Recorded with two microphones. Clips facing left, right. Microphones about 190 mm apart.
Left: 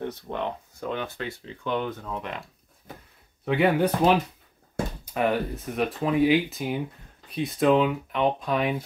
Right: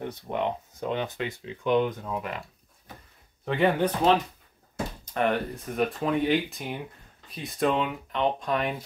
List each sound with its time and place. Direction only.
0.0 s speech: 15° right (ahead or behind)
3.4 s speech: 5° left (ahead or behind)